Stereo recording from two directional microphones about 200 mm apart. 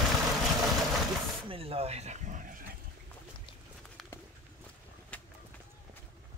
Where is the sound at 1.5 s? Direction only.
30° right (ahead or behind); by 2.8 s 45° right (ahead or behind).